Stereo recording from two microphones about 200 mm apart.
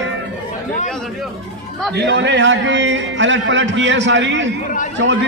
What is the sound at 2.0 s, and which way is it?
A man's voice, 60° right (ahead or behind).